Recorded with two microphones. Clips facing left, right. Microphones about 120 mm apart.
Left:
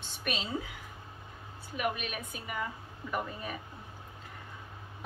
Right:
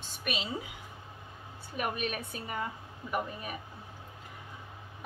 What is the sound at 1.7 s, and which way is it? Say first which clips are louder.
Speech: even; 35° right (ahead or behind).